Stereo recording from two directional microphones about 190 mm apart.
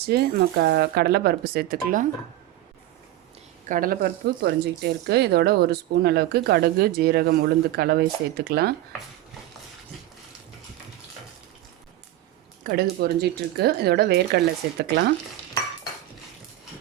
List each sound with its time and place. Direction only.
0.0 s speech: 55° right (ahead or behind)
3.7 s speech: 50° right (ahead or behind)
12.6 s speech: 55° right (ahead or behind)